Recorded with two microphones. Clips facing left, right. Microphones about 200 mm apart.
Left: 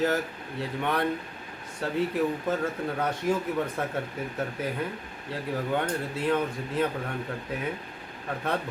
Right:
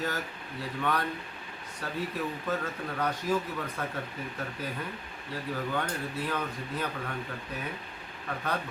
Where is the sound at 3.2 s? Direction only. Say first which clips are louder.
Left 3 dB; 20° left (ahead or behind).